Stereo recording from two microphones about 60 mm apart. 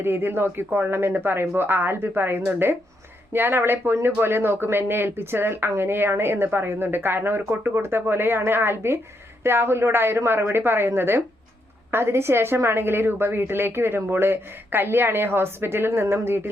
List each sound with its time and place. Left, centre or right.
0.0 s a woman's voice: right